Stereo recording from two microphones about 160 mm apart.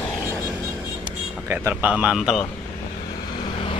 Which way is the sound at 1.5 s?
15° right (ahead or behind).